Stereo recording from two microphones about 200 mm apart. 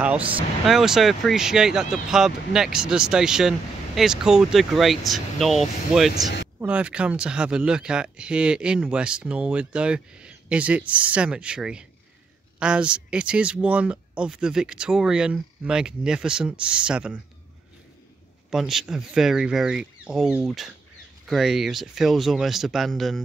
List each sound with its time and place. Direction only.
0.2 s speech: 25° right (ahead or behind)
0.7 s speech: centre (ahead or behind)
18.5 s speech: centre (ahead or behind)